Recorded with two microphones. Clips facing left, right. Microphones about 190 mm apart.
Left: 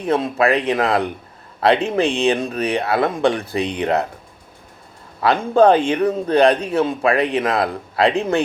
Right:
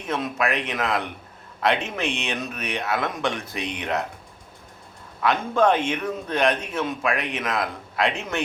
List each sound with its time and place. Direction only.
0.0 s a man's voice: 35° left (ahead or behind)
5.2 s a man's voice: 35° left (ahead or behind)